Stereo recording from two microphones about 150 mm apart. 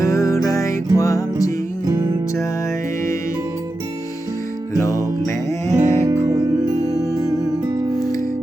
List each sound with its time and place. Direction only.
0.0 s music: 20° left (ahead or behind)
4.8 s music: 20° left (ahead or behind)
5.7 s music: 50° right (ahead or behind)
6.8 s music: 25° right (ahead or behind)
7.9 s music: 25° left (ahead or behind)